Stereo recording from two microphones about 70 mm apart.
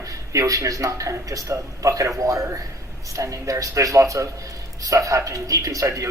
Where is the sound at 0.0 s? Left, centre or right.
Right.